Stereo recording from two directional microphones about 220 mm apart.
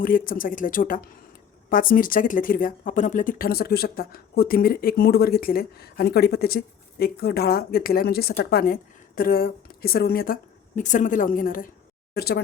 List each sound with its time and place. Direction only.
0.0 s speech: 40° left (ahead or behind)